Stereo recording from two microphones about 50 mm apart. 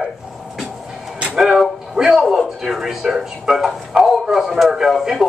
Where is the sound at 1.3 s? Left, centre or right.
Centre.